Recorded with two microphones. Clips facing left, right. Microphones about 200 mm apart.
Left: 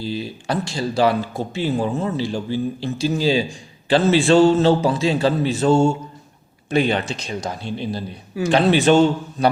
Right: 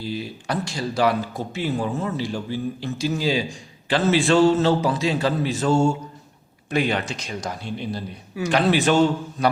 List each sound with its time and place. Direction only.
0.0 s speech: 30° left (ahead or behind)